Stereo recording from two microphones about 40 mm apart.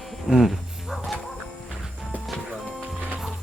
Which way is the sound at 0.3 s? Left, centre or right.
Centre.